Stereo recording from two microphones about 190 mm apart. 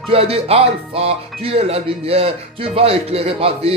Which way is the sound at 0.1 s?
30° right (ahead or behind).